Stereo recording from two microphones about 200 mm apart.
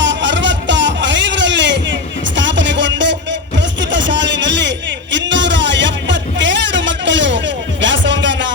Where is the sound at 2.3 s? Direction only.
65° right (ahead or behind).